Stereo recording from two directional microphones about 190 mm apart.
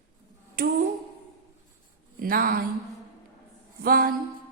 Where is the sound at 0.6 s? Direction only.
50° right (ahead or behind).